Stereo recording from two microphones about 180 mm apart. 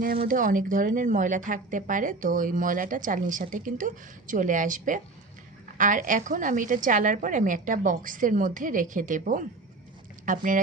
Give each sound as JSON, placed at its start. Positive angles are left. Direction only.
{"t": 0.3, "sound": "a woman's voice", "side_deg": -50}